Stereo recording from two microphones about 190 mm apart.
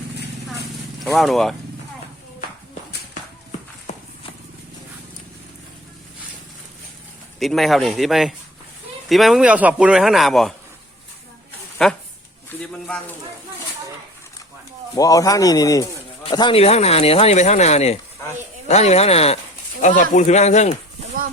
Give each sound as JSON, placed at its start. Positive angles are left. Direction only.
{"t": 1.0, "sound": "speech", "side_deg": 0}
{"t": 3.9, "sound": "horse", "side_deg": 35}
{"t": 7.3, "sound": "speech", "side_deg": 0}
{"t": 11.8, "sound": "speech", "side_deg": 0}
{"t": 14.9, "sound": "speech", "side_deg": 20}